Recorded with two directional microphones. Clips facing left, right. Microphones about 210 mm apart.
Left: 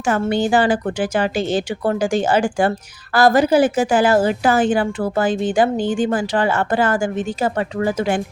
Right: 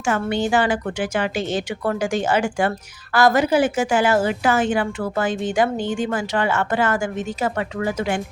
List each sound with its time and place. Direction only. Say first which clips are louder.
0.1 s a woman's voice: left 3 dB; 35° left (ahead or behind)